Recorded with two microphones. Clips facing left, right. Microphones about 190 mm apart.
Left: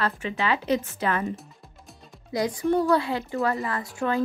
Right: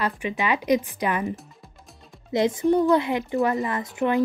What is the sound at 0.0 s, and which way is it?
A woman's voice, 15° right (ahead or behind).